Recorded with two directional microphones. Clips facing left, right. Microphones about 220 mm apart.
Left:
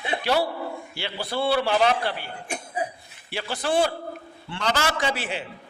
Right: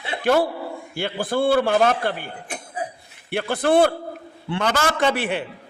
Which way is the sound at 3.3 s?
55° right (ahead or behind).